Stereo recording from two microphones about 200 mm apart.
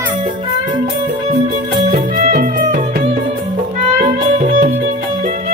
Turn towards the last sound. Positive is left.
turn(degrees=-40)  # may be behind; listen again after turning